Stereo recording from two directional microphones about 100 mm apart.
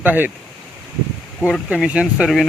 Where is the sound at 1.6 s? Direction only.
10° right (ahead or behind).